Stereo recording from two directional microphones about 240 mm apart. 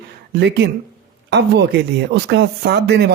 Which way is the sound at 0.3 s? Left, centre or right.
Right.